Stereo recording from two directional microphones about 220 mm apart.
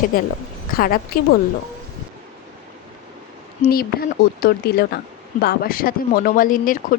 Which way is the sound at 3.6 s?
45° left (ahead or behind).